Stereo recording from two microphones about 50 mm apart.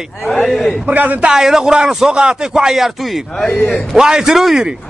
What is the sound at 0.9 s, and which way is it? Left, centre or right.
Speech, right.